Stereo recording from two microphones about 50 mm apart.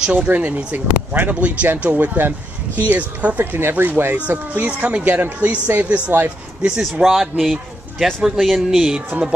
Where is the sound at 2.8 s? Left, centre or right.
Right.